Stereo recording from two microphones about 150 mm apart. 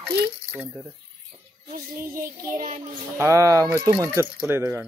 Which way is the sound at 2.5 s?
60° right (ahead or behind).